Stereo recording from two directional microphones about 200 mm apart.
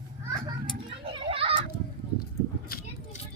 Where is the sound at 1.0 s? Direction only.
30° right (ahead or behind).